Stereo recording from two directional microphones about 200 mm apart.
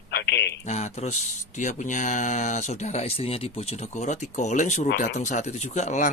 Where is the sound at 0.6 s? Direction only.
35° left (ahead or behind).